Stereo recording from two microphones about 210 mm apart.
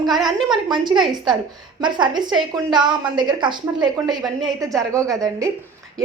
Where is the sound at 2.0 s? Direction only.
20° right (ahead or behind).